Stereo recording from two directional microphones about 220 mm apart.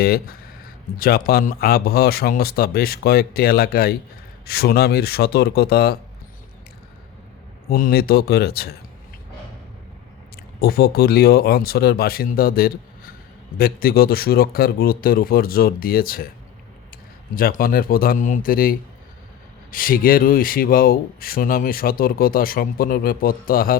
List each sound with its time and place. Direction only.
0.0 s speech: 45° left (ahead or behind)
7.7 s speech: 45° left (ahead or behind)
10.3 s speech: 45° left (ahead or behind)
17.3 s speech: 40° left (ahead or behind)